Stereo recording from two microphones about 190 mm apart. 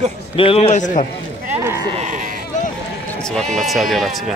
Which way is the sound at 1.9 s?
40° right (ahead or behind).